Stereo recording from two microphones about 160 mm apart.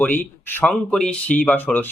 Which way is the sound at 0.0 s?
10° left (ahead or behind).